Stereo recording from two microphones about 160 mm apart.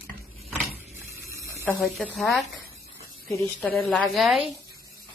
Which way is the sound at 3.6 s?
Centre (ahead or behind).